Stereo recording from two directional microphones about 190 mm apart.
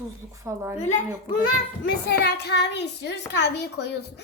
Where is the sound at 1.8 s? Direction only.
60° left (ahead or behind).